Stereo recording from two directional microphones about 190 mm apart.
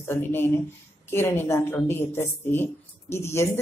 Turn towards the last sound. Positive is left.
turn(degrees=15)  # may be behind; listen again after turning